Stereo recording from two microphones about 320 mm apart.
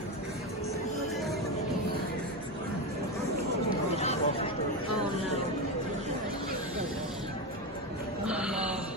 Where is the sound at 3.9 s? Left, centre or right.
Centre.